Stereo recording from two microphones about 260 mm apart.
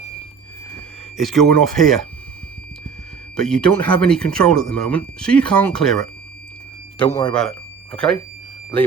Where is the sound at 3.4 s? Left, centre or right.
Centre.